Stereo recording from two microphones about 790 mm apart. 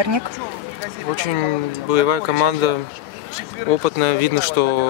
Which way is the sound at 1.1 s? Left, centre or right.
Right.